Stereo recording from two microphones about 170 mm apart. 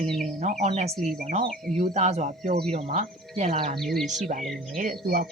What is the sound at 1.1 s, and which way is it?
Speech, 50° right (ahead or behind).